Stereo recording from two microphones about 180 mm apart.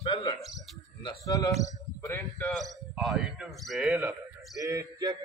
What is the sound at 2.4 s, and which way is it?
A man's voice, centre (ahead or behind).